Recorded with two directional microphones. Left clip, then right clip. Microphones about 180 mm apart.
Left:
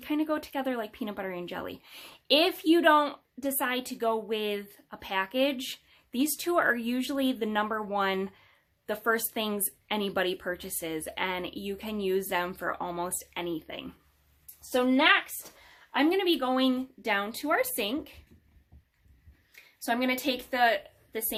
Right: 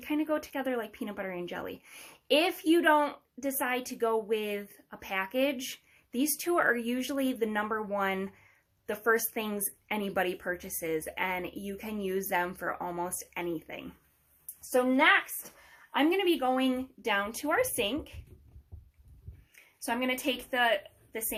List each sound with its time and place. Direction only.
0.0 s a woman's voice: 20° left (ahead or behind)
6.6 s a woman's voice: 20° left (ahead or behind)
19.8 s a woman's voice: 25° left (ahead or behind)